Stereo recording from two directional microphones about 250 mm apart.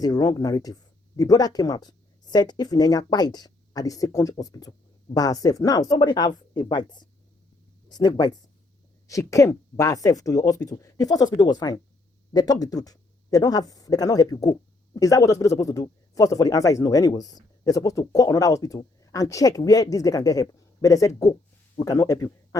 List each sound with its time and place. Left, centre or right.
0.0 s speech: centre